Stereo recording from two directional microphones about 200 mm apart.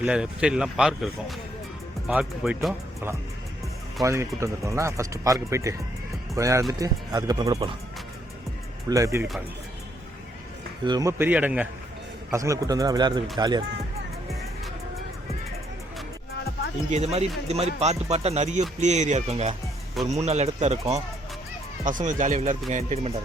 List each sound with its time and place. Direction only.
0.0 s speech: 5° right (ahead or behind)
4.0 s speech: 15° right (ahead or behind)
8.9 s speech: 15° right (ahead or behind)
10.8 s speech: 20° right (ahead or behind)
16.9 s speech: 35° right (ahead or behind)